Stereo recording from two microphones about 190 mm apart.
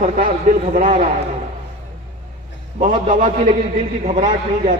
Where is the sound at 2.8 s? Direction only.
45° right (ahead or behind).